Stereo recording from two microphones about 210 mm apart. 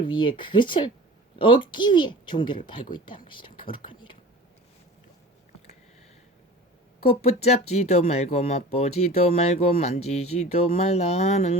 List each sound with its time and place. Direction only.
0.1 s speech: 25° left (ahead or behind)
7.0 s speech: 30° left (ahead or behind)